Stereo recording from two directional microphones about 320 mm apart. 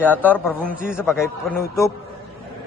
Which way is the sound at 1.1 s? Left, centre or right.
Centre.